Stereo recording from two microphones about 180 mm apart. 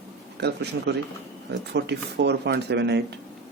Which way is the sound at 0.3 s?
65° right (ahead or behind).